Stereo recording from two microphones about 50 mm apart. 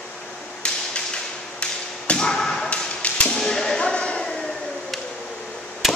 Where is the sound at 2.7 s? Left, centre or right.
Left.